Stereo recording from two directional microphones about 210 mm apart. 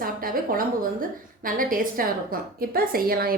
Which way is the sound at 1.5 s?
40° right (ahead or behind).